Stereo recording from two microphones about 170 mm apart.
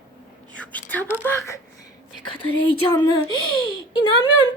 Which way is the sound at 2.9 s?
25° left (ahead or behind).